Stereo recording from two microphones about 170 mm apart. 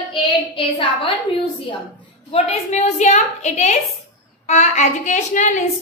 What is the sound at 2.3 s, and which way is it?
A woman's voice, 40° left (ahead or behind).